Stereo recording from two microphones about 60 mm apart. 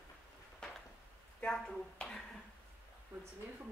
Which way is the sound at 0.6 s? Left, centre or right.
Centre.